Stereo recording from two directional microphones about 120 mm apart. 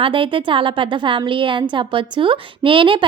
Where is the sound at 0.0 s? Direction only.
45° right (ahead or behind).